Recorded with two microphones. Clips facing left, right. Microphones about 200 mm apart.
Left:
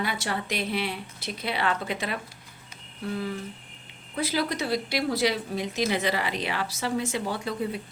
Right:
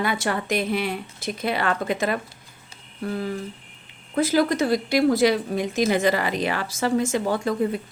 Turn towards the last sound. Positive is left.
turn(degrees=-45)  # may be behind; listen again after turning